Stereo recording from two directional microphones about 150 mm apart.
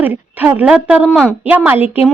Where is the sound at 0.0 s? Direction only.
15° right (ahead or behind).